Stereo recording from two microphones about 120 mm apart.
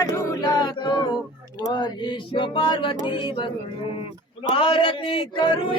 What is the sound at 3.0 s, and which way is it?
Male singing, 45° left (ahead or behind).